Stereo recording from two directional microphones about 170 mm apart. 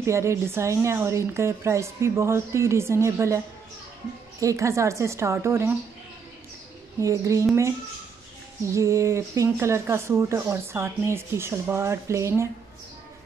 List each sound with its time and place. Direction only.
0.0 s speech: 15° right (ahead or behind)
4.4 s speech: 20° right (ahead or behind)
7.0 s speech: 20° right (ahead or behind)
8.7 s speech: 15° right (ahead or behind)